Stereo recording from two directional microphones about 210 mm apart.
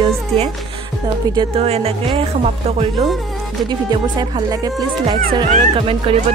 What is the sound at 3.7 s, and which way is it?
A woman's voice, 20° right (ahead or behind).